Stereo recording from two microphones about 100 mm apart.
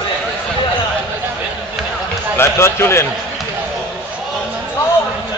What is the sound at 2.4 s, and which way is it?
Speech, 25° left (ahead or behind).